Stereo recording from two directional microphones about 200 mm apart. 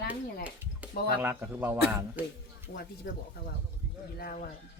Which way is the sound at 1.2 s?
10° right (ahead or behind).